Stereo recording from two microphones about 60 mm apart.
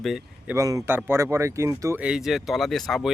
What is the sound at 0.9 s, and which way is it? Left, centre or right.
Speech, right.